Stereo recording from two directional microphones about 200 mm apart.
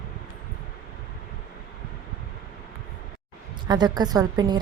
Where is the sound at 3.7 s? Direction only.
20° right (ahead or behind).